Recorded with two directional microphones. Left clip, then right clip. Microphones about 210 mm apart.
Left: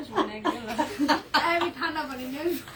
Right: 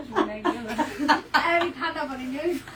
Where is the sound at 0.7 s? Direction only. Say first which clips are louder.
Right 3 dB; 30° right (ahead or behind).